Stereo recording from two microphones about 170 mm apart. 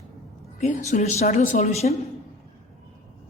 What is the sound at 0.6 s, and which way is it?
Speech, 40° left (ahead or behind).